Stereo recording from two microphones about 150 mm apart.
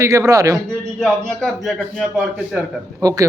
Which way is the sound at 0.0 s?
20° right (ahead or behind).